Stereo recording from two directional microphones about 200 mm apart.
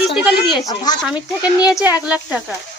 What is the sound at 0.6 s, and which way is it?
Speech, 20° left (ahead or behind).